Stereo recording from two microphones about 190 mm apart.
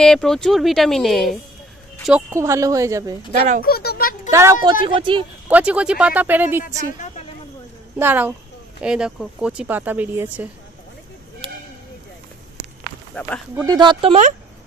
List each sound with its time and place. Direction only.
0.0 s speech: centre (ahead or behind)
2.0 s speech: 10° right (ahead or behind)
3.6 s a sound: 55° left (ahead or behind)
4.3 s speech: 15° right (ahead or behind)
4.8 s speech: 25° right (ahead or behind)
5.5 s speech: 5° right (ahead or behind)
8.0 s speech: 10° right (ahead or behind)
13.1 s speech: 5° left (ahead or behind)
13.7 s speech: 25° right (ahead or behind)